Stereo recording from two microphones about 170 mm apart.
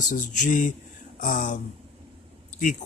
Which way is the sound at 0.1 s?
50° left (ahead or behind).